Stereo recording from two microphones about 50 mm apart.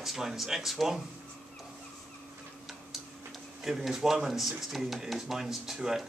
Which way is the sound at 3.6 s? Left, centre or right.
Centre.